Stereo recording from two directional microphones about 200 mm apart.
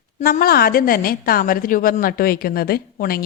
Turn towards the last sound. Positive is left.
turn(degrees=50)  # may be behind; listen again after turning